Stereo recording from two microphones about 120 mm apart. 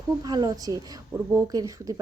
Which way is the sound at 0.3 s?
35° right (ahead or behind).